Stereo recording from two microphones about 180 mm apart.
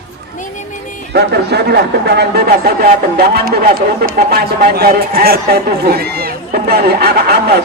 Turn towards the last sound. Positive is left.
turn(degrees=-65)  # may be behind; listen again after turning